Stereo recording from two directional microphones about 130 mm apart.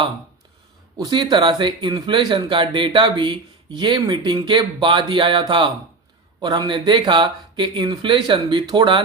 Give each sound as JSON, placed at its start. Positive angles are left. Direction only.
{"t": 0.9, "sound": "speech", "side_deg": -30}